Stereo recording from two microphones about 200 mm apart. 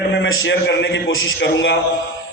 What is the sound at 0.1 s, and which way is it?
A man's voice, 65° left (ahead or behind).